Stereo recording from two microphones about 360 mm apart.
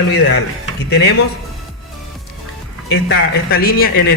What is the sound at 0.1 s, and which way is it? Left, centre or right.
A man's voice, left.